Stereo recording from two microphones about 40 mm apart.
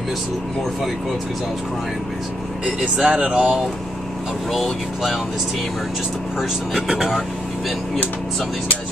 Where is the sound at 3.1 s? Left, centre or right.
Right.